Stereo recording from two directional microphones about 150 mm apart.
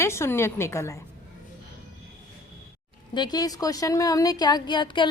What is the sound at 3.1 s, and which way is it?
A woman's voice, 30° left (ahead or behind).